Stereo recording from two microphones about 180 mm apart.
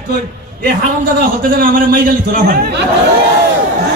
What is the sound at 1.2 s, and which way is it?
A man's voice, 55° right (ahead or behind).